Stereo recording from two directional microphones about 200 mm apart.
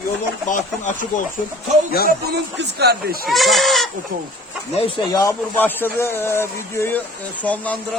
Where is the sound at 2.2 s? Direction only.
55° right (ahead or behind).